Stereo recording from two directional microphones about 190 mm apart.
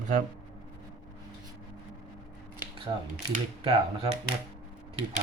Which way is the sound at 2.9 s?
25° right (ahead or behind).